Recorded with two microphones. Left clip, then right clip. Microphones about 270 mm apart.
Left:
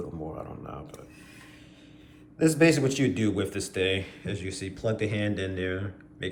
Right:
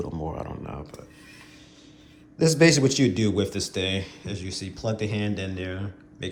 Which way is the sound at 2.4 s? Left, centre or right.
Right.